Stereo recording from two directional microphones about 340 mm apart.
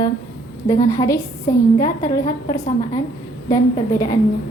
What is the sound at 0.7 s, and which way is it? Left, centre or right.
A woman's voice, centre.